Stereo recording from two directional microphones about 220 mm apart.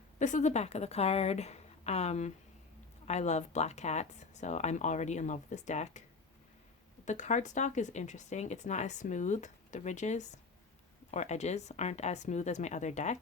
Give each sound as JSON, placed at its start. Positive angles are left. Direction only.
{"t": 0.2, "sound": "a woman's voice", "side_deg": 35}
{"t": 7.0, "sound": "speech", "side_deg": 35}